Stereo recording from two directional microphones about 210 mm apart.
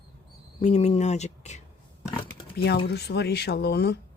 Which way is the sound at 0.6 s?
30° left (ahead or behind).